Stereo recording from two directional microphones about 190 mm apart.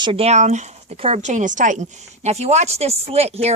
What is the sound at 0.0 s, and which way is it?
Speech, 30° right (ahead or behind).